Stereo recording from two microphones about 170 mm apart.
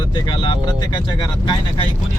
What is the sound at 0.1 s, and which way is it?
Speech, 25° left (ahead or behind).